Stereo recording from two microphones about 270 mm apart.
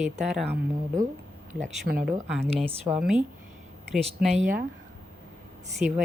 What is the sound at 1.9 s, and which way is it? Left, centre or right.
Speech, right.